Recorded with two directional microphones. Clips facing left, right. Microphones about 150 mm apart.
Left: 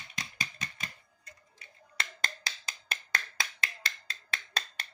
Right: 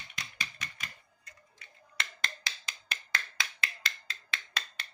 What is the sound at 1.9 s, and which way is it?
Finger snapping, 40° left (ahead or behind).